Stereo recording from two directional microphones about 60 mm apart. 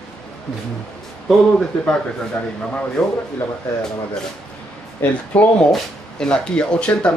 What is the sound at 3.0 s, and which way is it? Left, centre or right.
Speech, centre.